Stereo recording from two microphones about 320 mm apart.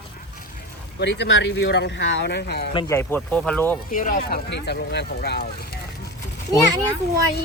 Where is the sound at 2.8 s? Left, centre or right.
Centre.